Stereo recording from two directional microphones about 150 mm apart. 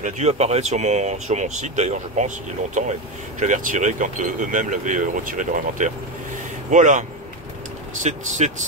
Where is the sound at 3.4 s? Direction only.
60° right (ahead or behind).